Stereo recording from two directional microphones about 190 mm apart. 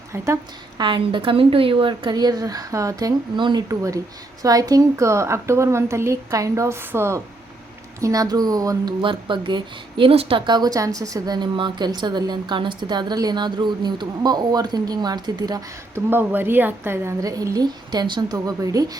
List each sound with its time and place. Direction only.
0.8 s a woman's voice: 25° right (ahead or behind)